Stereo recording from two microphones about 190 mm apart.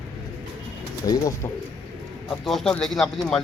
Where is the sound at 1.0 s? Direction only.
20° left (ahead or behind).